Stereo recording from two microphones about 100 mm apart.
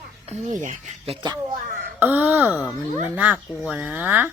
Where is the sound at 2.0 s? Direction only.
20° right (ahead or behind).